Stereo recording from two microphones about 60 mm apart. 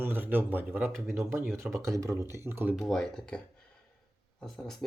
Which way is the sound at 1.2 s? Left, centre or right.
Right.